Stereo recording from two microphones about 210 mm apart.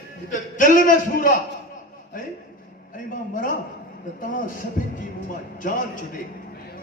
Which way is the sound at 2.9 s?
40° left (ahead or behind).